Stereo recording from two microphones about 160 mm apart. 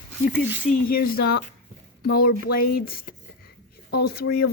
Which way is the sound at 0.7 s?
65° left (ahead or behind).